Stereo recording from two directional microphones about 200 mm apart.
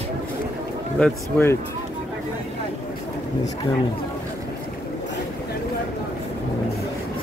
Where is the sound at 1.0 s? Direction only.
10° left (ahead or behind).